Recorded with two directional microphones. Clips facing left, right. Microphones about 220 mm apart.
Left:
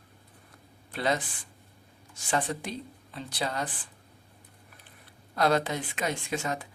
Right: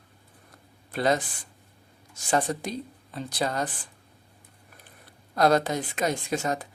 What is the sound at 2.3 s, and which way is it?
Speech, 40° right (ahead or behind).